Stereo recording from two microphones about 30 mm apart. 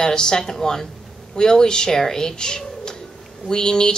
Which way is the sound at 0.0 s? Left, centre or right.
Left.